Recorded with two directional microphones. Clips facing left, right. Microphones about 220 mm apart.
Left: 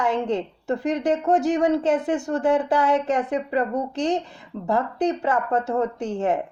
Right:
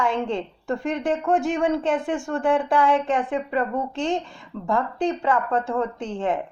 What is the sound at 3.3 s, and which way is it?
Speech, 20° left (ahead or behind).